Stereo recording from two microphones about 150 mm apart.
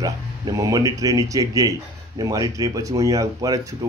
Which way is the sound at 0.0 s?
25° right (ahead or behind).